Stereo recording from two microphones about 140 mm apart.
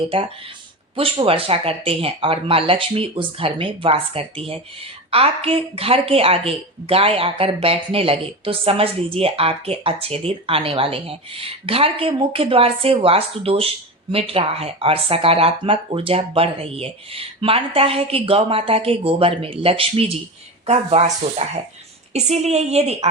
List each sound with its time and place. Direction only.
0.9 s speech: 40° right (ahead or behind)